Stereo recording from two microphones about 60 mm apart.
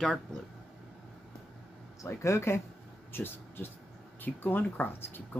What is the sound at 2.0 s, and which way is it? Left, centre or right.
Speech, left.